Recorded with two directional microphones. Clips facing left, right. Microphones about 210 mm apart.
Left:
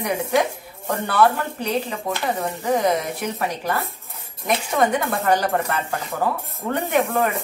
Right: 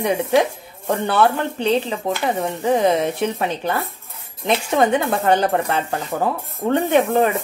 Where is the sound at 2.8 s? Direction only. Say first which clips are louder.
Right 4 dB; 25° right (ahead or behind).